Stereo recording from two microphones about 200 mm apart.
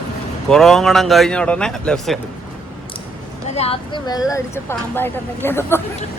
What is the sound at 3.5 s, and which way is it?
Speech, 30° left (ahead or behind).